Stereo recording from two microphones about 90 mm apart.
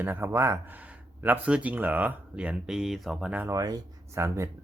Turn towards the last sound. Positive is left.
turn(degrees=-30)  # may be behind; listen again after turning